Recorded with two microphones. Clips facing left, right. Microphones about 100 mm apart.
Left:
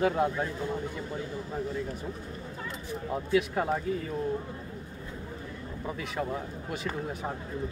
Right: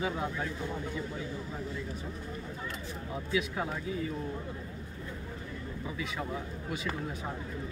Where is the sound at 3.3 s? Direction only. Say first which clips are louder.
Left 6 dB; 45° left (ahead or behind).